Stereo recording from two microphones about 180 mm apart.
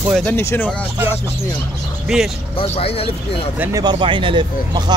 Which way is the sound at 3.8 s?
25° right (ahead or behind).